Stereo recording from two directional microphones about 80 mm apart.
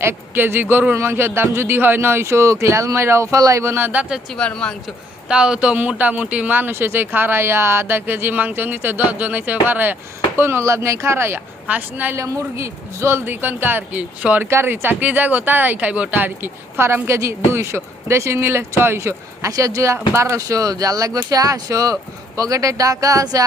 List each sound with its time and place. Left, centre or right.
0.0 s speech: right
4.3 s speech: centre
5.3 s speech: centre; by 11.3 s right
11.7 s speech: right
12.1 s speech: right; by 14.4 s centre
14.5 s speech: right